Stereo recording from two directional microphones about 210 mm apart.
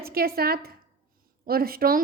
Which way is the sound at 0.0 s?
45° right (ahead or behind).